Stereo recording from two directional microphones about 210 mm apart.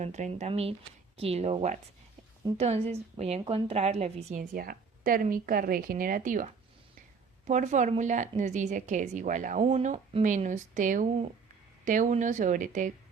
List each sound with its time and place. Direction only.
0.0 s a woman's voice: 35° right (ahead or behind)